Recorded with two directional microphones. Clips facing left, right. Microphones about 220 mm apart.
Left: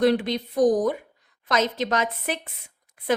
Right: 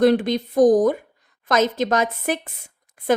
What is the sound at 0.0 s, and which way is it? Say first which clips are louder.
Speech: right 4 dB; 50° right (ahead or behind).